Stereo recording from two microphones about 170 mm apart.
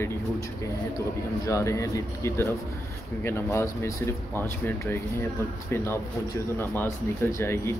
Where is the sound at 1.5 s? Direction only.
15° left (ahead or behind).